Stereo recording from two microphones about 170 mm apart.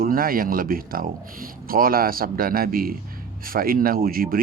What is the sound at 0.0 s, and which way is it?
Speech, 60° right (ahead or behind).